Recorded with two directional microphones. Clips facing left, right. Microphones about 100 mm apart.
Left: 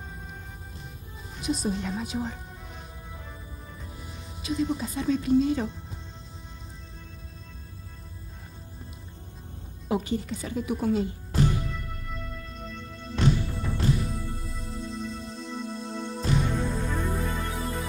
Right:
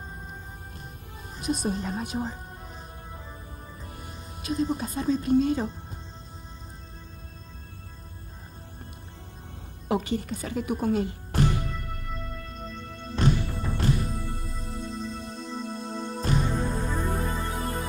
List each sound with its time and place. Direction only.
1.3 s a woman's voice: 45° right (ahead or behind)
2.3 s music: 35° right (ahead or behind)
3.8 s music: 55° right (ahead or behind)
4.1 s speech: 40° right (ahead or behind)
5.3 s a woman's voice: 50° right (ahead or behind)
9.8 s speech: 65° right (ahead or behind)
11.7 s music: 50° right (ahead or behind)
12.8 s music: 55° right (ahead or behind)
14.2 s music: 55° right (ahead or behind)